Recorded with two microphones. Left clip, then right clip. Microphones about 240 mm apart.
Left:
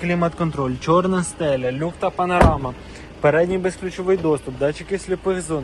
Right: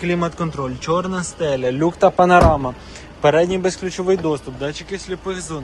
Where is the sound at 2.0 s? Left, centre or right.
Right.